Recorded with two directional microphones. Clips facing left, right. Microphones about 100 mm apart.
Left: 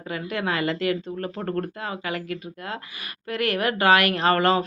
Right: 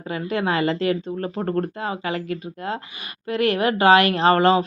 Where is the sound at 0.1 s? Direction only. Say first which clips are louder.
Right 4 dB; 30° right (ahead or behind).